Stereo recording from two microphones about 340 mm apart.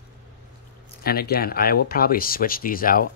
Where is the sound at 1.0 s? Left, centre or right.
Left.